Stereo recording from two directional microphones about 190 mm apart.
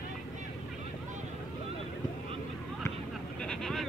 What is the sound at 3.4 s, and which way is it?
Sheep, 5° left (ahead or behind).